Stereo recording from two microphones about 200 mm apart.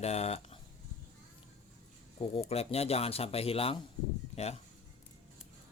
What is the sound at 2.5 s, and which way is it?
Speech, 30° left (ahead or behind).